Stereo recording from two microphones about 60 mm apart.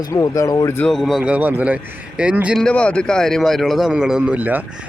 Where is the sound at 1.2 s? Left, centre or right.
Right.